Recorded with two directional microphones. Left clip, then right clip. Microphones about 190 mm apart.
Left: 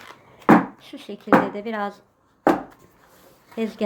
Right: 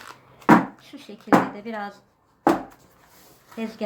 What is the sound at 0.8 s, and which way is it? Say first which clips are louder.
A woman's voice: left 5 dB; 50° left (ahead or behind).